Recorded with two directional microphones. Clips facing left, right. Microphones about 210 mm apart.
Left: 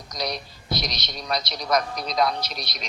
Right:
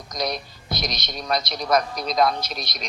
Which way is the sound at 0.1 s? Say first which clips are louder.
Right 3 dB; 50° right (ahead or behind).